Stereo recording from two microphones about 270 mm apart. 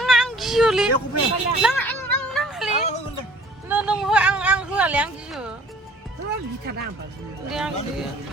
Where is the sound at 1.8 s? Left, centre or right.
Centre.